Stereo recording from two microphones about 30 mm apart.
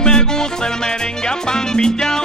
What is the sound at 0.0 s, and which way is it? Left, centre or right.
Music, left.